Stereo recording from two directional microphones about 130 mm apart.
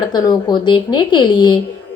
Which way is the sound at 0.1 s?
30° left (ahead or behind).